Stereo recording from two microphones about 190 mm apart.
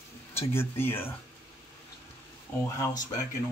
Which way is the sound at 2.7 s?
20° left (ahead or behind).